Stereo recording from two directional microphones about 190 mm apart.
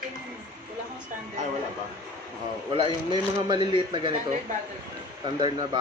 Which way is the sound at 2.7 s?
25° right (ahead or behind).